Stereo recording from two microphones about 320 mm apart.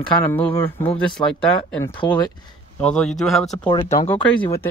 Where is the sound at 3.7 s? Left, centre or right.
Centre.